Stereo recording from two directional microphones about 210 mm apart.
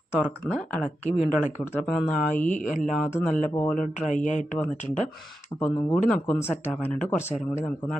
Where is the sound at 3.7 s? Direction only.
35° left (ahead or behind).